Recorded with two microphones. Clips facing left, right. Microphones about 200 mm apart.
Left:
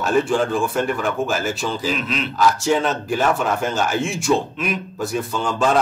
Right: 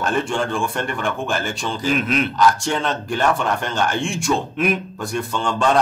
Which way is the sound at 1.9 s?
50° right (ahead or behind).